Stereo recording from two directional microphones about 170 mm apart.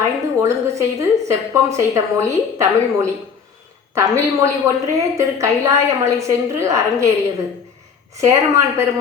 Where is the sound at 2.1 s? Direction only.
15° right (ahead or behind).